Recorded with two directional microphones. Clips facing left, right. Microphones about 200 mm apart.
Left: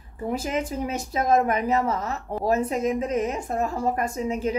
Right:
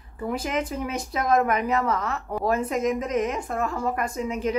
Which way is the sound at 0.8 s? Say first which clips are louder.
Left 1 dB; 35° left (ahead or behind).